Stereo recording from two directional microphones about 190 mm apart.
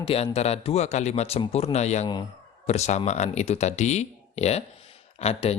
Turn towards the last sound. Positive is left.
turn(degrees=30)  # may be behind; listen again after turning